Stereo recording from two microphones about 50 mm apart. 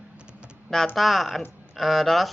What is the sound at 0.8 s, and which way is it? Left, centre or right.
Speech, centre.